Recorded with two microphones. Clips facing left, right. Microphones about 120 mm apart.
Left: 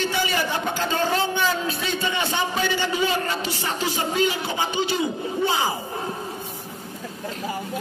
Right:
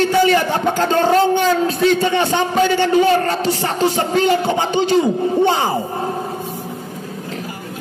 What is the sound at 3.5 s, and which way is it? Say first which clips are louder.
Music: right 9 dB; 50° right (ahead or behind).